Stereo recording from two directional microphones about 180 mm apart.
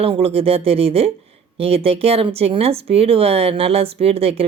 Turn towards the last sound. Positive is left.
turn(degrees=-35)  # may be behind; listen again after turning